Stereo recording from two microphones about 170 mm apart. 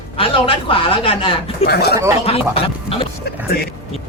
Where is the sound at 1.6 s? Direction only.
70° left (ahead or behind).